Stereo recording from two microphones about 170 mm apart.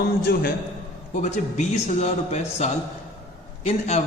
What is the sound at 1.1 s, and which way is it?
A man's voice, 45° left (ahead or behind).